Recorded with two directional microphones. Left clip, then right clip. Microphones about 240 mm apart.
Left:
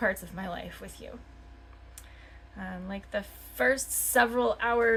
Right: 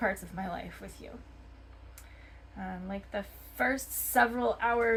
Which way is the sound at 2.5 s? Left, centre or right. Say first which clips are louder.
Even; left.